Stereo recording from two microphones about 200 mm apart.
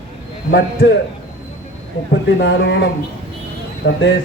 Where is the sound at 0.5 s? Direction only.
60° left (ahead or behind).